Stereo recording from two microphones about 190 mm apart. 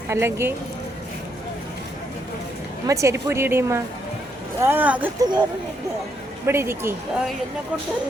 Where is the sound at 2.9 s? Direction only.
15° right (ahead or behind).